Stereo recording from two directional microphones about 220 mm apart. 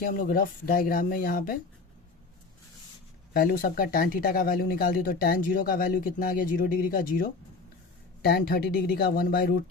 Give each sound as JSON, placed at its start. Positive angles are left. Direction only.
{"t": 0.0, "sound": "speech", "side_deg": 40}
{"t": 3.3, "sound": "speech", "side_deg": 40}